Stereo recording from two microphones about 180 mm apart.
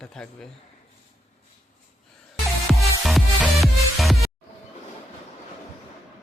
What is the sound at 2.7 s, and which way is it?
Music, centre (ahead or behind).